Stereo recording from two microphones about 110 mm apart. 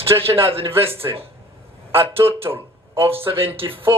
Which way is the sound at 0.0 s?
60° right (ahead or behind).